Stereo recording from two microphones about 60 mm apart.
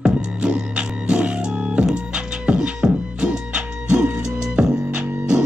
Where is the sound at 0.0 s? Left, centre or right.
Centre.